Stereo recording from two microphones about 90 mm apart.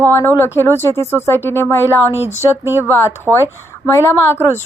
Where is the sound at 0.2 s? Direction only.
30° left (ahead or behind).